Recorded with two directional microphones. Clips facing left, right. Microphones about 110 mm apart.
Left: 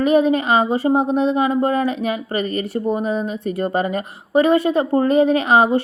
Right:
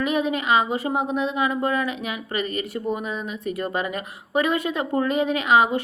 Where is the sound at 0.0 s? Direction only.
35° left (ahead or behind).